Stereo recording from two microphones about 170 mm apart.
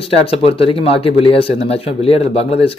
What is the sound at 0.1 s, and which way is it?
Speech, 35° left (ahead or behind).